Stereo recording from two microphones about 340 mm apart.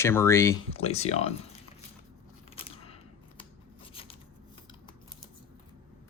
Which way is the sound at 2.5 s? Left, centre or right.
Centre.